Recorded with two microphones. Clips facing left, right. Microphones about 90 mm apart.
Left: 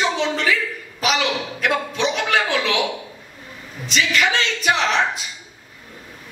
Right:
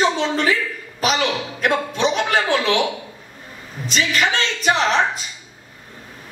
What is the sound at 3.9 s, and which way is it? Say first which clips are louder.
A man's voice: even; 40° right (ahead or behind).